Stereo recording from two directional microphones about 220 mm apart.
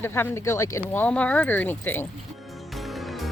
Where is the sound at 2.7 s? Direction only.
Centre (ahead or behind).